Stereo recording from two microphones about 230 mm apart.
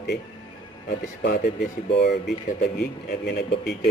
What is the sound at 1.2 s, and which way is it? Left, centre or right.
Speech, left.